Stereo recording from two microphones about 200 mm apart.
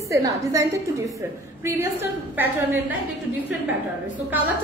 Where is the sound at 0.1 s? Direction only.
15° right (ahead or behind).